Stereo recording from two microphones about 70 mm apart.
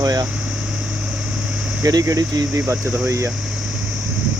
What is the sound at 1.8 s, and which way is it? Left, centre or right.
Speech, right.